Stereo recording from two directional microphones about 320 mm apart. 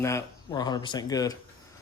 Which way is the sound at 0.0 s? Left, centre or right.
Centre.